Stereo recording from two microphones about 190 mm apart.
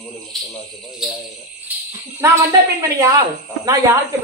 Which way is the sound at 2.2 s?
15° right (ahead or behind).